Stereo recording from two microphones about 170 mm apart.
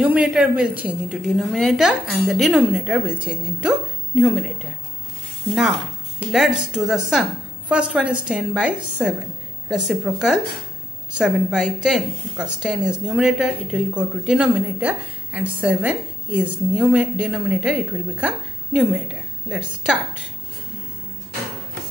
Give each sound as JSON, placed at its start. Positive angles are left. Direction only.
{"t": 0.0, "sound": "a woman's voice", "side_deg": -10}